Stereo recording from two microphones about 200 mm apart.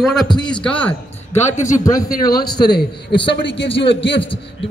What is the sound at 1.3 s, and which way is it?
Speech, 35° left (ahead or behind).